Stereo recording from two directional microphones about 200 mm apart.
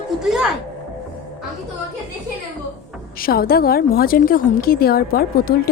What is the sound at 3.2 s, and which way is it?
A woman's voice, 45° left (ahead or behind).